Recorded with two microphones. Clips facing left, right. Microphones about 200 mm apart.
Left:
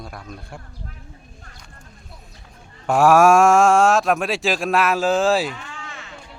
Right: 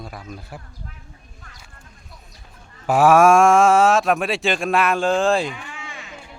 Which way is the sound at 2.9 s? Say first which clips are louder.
Even; centre (ahead or behind).